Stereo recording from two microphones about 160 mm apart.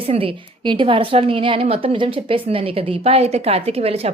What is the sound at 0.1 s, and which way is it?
A woman's voice, 35° right (ahead or behind).